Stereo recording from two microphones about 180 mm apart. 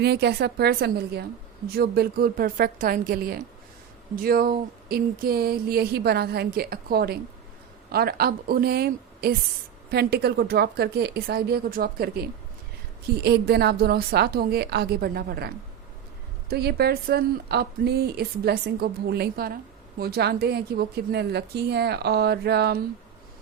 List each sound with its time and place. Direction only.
0.0 s a woman's voice: 65° right (ahead or behind)